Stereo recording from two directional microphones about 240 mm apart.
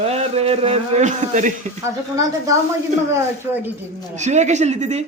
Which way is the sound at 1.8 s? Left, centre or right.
Centre.